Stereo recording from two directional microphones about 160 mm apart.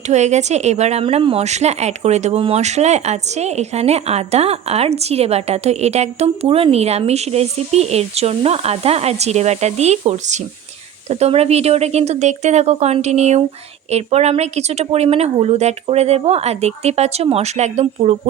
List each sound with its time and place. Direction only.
0.1 s a woman's voice: 45° right (ahead or behind)